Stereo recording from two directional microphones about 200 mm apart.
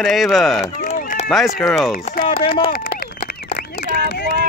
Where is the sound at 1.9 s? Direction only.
45° left (ahead or behind).